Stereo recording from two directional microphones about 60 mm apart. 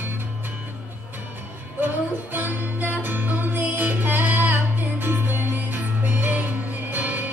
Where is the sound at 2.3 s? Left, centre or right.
Right.